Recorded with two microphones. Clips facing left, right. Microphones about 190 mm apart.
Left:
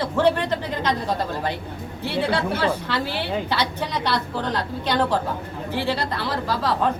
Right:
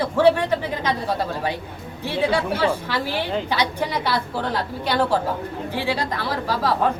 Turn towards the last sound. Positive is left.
turn(degrees=-10)  # may be behind; listen again after turning